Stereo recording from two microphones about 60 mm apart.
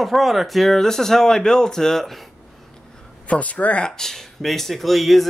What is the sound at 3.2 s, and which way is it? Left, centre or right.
Speech, left.